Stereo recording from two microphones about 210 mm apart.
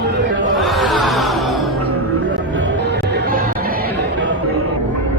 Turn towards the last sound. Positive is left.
turn(degrees=-45)  # may be behind; listen again after turning